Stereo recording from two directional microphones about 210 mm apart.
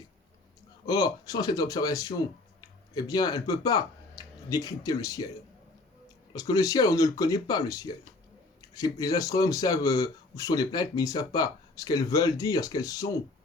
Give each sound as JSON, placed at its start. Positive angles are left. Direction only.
{"t": 0.9, "sound": "speech", "side_deg": 20}
{"t": 6.3, "sound": "speech", "side_deg": 15}